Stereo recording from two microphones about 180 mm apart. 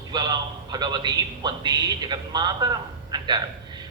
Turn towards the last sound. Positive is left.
turn(degrees=-25)  # may be behind; listen again after turning